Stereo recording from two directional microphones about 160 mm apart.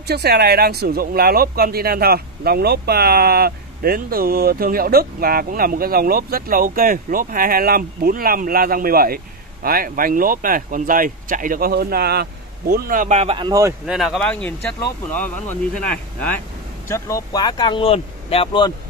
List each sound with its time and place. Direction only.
0.0 s speech: 90° right; by 13.1 s 65° right (ahead or behind)
13.1 s speech: 40° right (ahead or behind)
13.5 s speech: 20° right (ahead or behind)
13.8 s speech: centre (ahead or behind); by 18.7 s 35° left (ahead or behind)